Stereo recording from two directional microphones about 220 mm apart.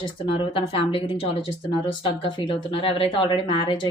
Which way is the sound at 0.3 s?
25° left (ahead or behind).